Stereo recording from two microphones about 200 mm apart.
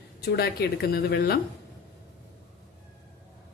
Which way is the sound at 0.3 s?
50° left (ahead or behind).